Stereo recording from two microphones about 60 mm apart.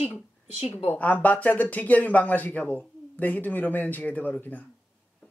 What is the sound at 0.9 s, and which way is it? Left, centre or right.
Speech, left.